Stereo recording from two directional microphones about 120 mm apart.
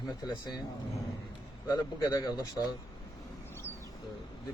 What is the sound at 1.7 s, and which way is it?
A man's voice, 30° left (ahead or behind).